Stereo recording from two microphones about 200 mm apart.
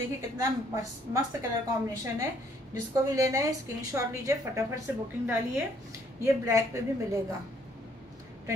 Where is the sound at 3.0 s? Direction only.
15° right (ahead or behind).